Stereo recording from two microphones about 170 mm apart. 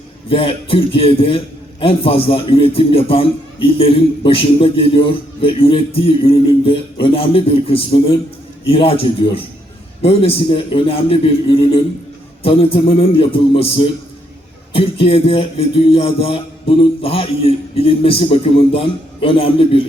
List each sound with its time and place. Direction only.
0.3 s a man's voice: 30° left (ahead or behind)